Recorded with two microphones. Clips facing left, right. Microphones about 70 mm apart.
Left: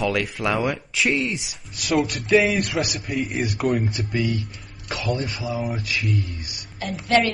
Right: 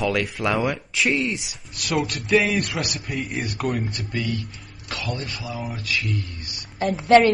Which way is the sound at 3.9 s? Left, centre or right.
Centre.